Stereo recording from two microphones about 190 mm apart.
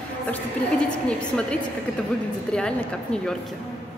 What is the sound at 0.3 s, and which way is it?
A woman's voice, 5° left (ahead or behind).